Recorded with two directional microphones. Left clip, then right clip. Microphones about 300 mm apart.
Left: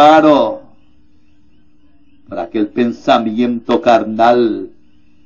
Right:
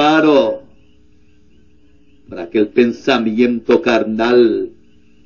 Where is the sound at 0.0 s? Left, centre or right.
Left.